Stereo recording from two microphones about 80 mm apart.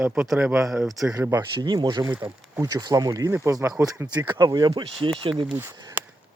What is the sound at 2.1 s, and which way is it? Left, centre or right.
Speech, right.